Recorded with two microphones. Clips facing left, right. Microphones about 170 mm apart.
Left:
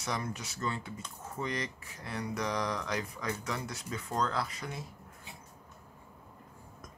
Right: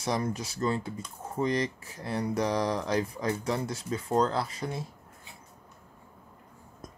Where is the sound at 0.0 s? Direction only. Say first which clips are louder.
Right 7 dB; 35° right (ahead or behind).